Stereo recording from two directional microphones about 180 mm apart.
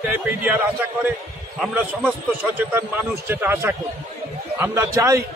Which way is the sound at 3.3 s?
15° right (ahead or behind).